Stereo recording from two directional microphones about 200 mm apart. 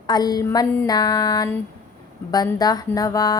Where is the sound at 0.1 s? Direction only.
20° left (ahead or behind).